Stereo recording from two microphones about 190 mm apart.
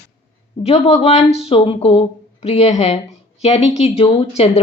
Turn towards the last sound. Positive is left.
turn(degrees=30)  # may be behind; listen again after turning